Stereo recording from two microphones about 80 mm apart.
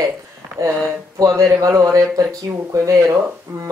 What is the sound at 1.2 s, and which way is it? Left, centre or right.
Speech, right.